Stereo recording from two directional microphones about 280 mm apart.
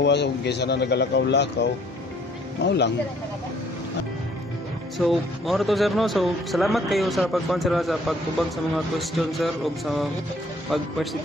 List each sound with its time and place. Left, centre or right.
0.0 s a man's voice: left
4.9 s speech: centre